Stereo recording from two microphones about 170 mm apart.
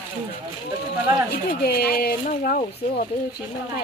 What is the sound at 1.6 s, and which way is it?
Speech, 65° left (ahead or behind).